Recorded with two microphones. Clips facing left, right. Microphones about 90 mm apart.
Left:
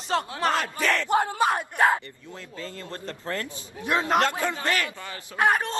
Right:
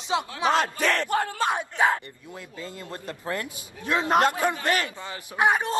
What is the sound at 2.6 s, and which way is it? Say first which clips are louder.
Speech: left 1 dB; 15° right (ahead or behind).